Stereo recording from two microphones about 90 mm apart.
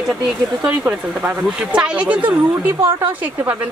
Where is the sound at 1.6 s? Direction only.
10° right (ahead or behind).